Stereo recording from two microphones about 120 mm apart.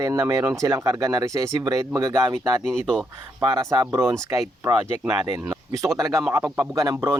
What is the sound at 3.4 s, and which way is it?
Speech, 30° right (ahead or behind).